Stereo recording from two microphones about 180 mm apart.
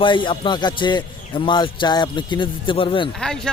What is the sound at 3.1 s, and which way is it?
Speech, 5° left (ahead or behind).